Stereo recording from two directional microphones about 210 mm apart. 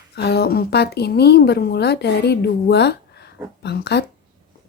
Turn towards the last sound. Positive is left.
turn(degrees=50)  # may be behind; listen again after turning